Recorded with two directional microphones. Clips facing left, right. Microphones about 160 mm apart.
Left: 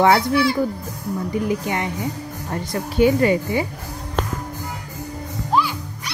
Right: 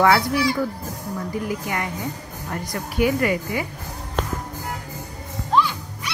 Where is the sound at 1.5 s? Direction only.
20° left (ahead or behind).